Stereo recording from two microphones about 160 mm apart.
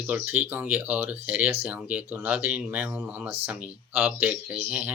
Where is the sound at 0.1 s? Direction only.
10° right (ahead or behind).